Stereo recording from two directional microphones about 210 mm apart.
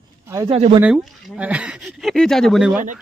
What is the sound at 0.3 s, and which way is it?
Speech, 25° right (ahead or behind).